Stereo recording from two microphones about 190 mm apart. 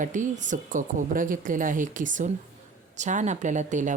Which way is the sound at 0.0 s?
40° right (ahead or behind).